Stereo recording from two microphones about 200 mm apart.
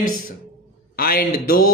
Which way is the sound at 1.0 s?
50° left (ahead or behind).